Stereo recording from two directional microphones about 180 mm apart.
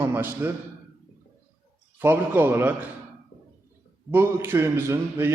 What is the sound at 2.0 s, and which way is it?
Speech, 10° right (ahead or behind).